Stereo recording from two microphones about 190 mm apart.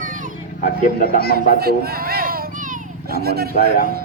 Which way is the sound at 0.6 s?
50° left (ahead or behind).